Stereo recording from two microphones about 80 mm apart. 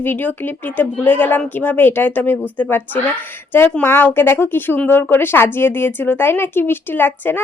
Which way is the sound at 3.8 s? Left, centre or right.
Left.